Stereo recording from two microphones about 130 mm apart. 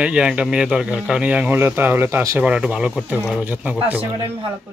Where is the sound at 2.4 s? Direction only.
10° right (ahead or behind).